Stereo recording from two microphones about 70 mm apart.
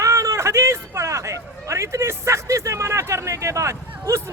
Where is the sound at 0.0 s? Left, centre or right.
Right.